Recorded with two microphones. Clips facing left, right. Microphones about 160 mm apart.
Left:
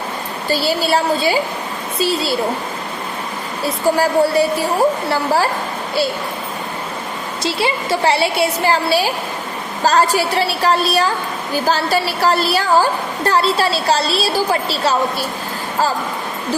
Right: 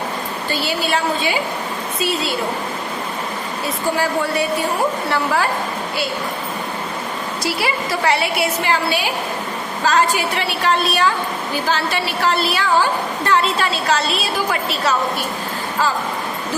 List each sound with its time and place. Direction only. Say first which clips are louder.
0.5 s a woman's voice: left 5 dB; 35° left (ahead or behind)
3.9 s a woman's voice: left 6 dB; 35° left (ahead or behind)
7.4 s a woman's voice: left 3 dB; 25° left (ahead or behind)